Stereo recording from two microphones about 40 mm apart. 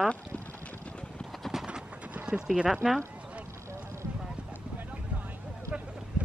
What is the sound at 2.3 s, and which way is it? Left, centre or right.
Speech, right.